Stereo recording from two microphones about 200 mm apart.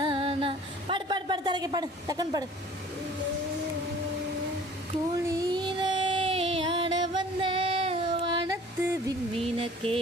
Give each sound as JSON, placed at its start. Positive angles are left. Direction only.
{"t": 0.0, "sound": "a sound", "side_deg": -25}
{"t": 5.1, "sound": "child singing", "side_deg": -20}
{"t": 9.4, "sound": "vehicle", "side_deg": -30}